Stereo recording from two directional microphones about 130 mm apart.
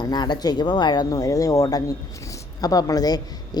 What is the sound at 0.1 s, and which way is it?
Speech, 30° left (ahead or behind).